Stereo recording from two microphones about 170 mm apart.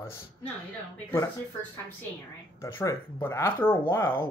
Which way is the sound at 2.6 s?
15° left (ahead or behind).